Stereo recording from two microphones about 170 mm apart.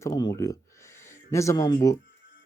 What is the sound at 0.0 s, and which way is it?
Speech, 20° left (ahead or behind).